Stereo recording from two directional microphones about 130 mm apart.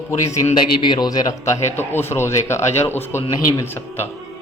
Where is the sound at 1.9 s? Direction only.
20° left (ahead or behind).